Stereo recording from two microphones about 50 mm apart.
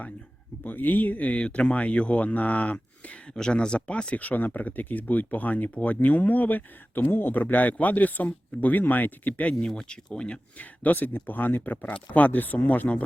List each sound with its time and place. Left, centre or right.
0.6 s speech: left
3.3 s speech: centre
9.6 s speech: centre
10.6 s speech: left